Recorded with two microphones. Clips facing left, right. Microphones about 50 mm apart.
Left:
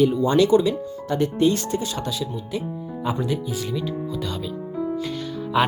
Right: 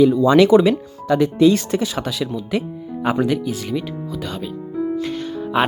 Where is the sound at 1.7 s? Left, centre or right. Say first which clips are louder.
Right 4 dB; right.